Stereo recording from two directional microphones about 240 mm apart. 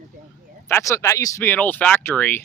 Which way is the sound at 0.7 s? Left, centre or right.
Centre.